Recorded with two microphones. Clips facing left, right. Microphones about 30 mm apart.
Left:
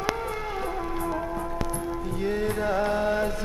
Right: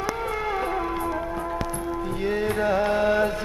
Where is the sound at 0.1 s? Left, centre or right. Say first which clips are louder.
Right 3 dB; centre.